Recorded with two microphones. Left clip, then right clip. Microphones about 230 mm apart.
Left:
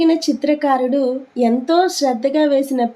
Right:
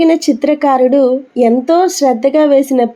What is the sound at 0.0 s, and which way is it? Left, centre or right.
Speech, centre.